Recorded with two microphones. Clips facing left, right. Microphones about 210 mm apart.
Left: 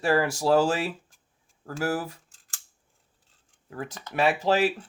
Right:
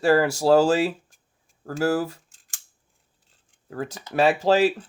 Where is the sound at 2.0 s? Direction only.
25° right (ahead or behind).